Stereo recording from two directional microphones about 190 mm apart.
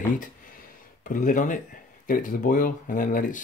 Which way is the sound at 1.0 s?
45° left (ahead or behind).